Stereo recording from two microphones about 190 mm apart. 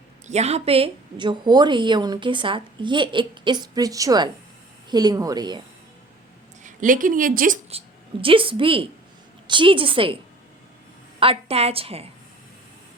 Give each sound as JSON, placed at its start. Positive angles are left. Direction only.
{"t": 0.3, "sound": "a woman's voice", "side_deg": -35}
{"t": 6.6, "sound": "a woman's voice", "side_deg": -40}
{"t": 7.7, "sound": "a woman's voice", "side_deg": -30}
{"t": 11.2, "sound": "a woman's voice", "side_deg": -30}